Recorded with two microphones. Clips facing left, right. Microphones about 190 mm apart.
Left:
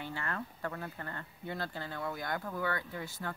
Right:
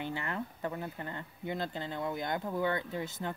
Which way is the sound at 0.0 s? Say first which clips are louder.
Right 3 dB; 20° right (ahead or behind).